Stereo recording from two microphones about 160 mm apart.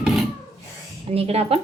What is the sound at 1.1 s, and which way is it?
Speech, 40° right (ahead or behind).